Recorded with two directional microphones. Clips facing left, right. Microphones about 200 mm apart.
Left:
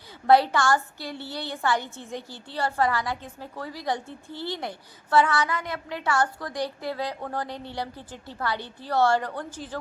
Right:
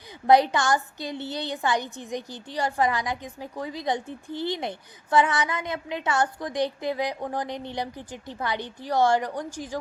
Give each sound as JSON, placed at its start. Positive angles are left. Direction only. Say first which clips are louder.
{"t": 0.3, "sound": "a woman's voice", "louder": "even", "side_deg": -20}